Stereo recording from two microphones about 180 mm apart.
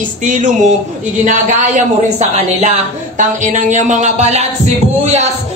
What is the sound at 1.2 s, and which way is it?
A man's voice, 45° right (ahead or behind).